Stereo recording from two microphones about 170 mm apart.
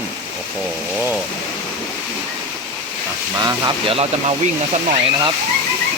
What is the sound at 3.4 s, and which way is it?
Speech, 25° right (ahead or behind).